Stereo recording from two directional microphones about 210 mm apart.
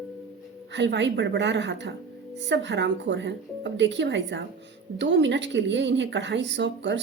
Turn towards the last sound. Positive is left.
turn(degrees=-60)  # may be behind; listen again after turning